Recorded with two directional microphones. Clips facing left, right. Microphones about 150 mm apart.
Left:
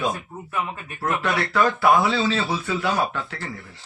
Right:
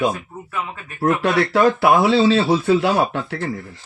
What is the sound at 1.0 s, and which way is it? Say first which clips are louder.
Speech: right 7 dB; 55° right (ahead or behind).